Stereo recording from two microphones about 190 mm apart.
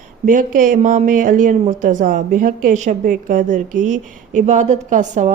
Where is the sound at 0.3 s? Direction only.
45° right (ahead or behind).